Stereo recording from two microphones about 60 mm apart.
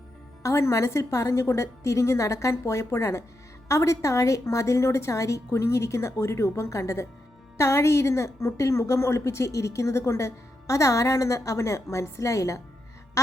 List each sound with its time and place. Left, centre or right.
0.4 s a woman's voice: left